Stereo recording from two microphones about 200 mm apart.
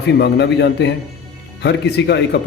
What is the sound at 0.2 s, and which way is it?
Speech, 60° left (ahead or behind).